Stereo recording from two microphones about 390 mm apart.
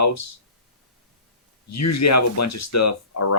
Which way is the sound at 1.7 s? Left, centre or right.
Left.